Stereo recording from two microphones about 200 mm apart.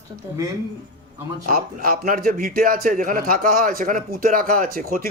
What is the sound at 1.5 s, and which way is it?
A man's voice, 45° right (ahead or behind).